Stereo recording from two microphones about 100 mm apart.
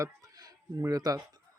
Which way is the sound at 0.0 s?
35° right (ahead or behind).